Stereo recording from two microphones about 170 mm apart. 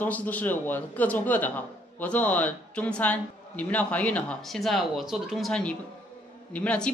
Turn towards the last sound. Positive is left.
turn(degrees=5)  # may be behind; listen again after turning